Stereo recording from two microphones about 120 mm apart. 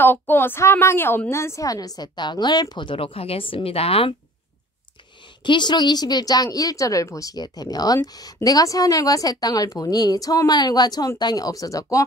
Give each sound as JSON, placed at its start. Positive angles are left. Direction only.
{"t": 0.0, "sound": "a woman's voice", "side_deg": 15}
{"t": 5.4, "sound": "a woman's voice", "side_deg": 40}